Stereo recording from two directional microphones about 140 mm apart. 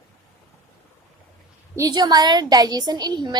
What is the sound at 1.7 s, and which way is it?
A woman's voice, 30° right (ahead or behind).